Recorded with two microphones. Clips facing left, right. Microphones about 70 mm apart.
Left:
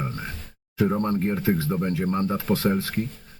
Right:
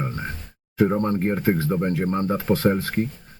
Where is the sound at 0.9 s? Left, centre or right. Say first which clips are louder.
Right 2 dB; right.